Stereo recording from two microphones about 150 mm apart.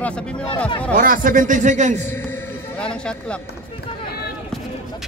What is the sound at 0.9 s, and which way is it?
A man's voice, 65° right (ahead or behind).